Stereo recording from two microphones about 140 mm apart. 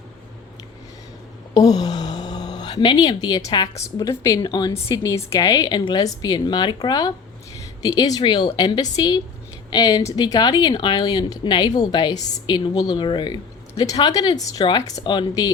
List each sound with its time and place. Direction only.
1.5 s speech: 30° left (ahead or behind)